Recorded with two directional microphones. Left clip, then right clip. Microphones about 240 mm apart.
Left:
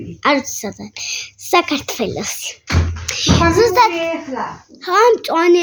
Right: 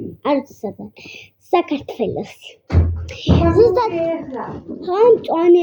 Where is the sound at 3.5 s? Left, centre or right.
Left.